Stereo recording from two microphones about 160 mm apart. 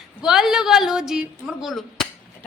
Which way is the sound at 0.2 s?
5° right (ahead or behind).